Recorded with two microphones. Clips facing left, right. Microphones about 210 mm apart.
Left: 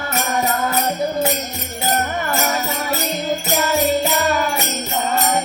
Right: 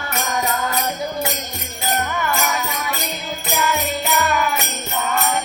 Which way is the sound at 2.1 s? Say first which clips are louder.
Left 2 dB; 40° left (ahead or behind).